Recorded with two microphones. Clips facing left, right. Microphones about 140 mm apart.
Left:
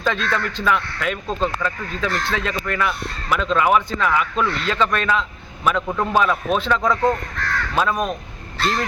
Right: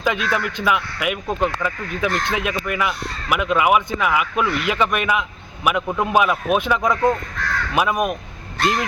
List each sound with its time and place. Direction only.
0.0 s speech: 10° right (ahead or behind)